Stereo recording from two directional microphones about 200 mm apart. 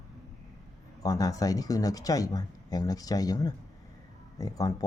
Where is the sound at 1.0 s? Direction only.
20° left (ahead or behind).